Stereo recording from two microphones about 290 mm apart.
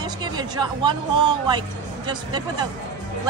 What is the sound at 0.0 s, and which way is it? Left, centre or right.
Speech, centre.